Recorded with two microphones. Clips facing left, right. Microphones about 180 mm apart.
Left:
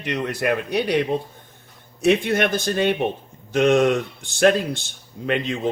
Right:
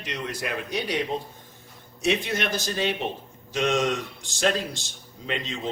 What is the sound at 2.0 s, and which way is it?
Speech, 55° left (ahead or behind).